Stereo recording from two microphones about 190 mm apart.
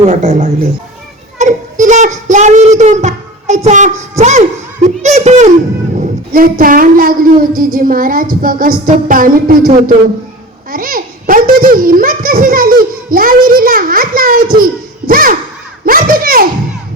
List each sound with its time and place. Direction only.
0.1 s a woman's voice: 40° right (ahead or behind)
6.0 s speech: 50° right (ahead or behind)
15.0 s a sound: 50° right (ahead or behind)
15.9 s a child's voice: 50° right (ahead or behind)